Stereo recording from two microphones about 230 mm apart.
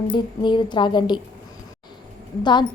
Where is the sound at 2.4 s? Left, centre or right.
Centre.